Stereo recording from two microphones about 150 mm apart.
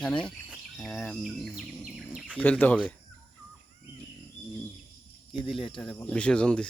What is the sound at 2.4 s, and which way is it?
Speech, 10° left (ahead or behind).